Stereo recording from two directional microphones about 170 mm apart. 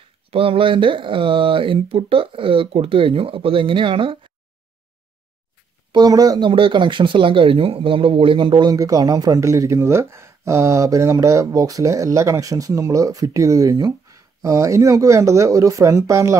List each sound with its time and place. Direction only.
0.3 s speech: 35° right (ahead or behind)
5.9 s speech: 25° right (ahead or behind)